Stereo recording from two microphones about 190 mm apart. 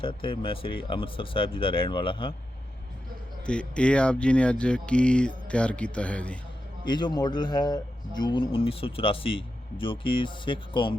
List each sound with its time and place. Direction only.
0.0 s a man's voice: 25° left (ahead or behind)
3.4 s speech: 5° left (ahead or behind)
6.8 s a man's voice: 25° left (ahead or behind)